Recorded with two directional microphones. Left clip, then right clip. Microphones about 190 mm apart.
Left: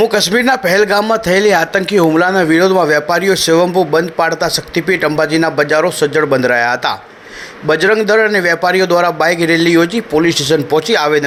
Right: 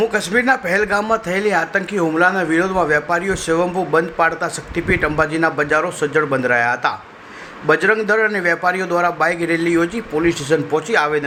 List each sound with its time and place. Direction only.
0.0 s a man's voice: 20° left (ahead or behind)